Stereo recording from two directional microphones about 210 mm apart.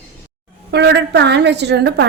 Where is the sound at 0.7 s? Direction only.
55° right (ahead or behind).